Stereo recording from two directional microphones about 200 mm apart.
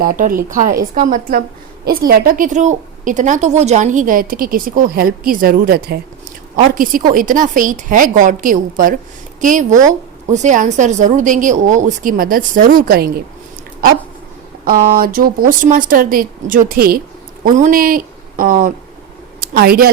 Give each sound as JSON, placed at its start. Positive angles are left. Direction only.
{"t": 0.0, "sound": "a woman's voice", "side_deg": -45}
{"t": 14.6, "sound": "a woman's voice", "side_deg": -45}